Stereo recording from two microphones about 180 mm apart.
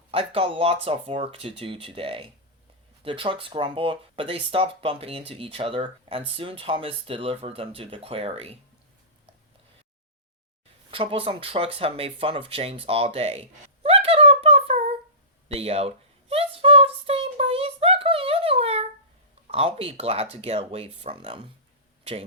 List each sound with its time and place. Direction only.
0.1 s speech: 30° right (ahead or behind)
10.9 s speech: 30° right (ahead or behind)
16.3 s a sound: 30° right (ahead or behind)
19.5 s speech: 35° right (ahead or behind)